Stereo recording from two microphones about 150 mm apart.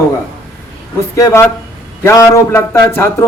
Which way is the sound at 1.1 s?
20° left (ahead or behind).